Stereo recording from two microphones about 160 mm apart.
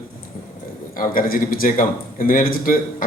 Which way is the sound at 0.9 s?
60° left (ahead or behind).